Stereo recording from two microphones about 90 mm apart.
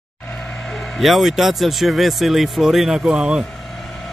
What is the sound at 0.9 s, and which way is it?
Speech, centre (ahead or behind).